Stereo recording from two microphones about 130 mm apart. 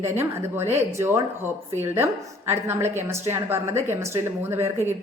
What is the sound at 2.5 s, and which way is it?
A woman's voice, 20° right (ahead or behind).